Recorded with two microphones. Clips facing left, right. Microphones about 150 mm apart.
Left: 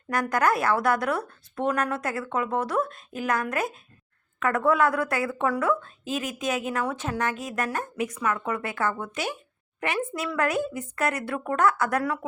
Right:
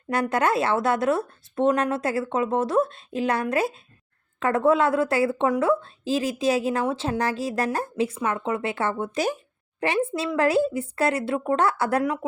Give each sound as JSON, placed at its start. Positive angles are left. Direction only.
{"t": 0.1, "sound": "a woman's voice", "side_deg": -25}